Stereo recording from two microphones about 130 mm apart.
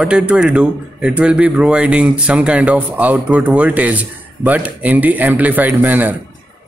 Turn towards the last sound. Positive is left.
turn(degrees=-15)  # may be behind; listen again after turning